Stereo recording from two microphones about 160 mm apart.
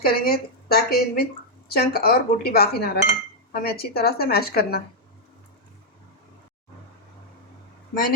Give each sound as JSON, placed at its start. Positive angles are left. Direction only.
{"t": 0.0, "sound": "a woman's voice", "side_deg": 70}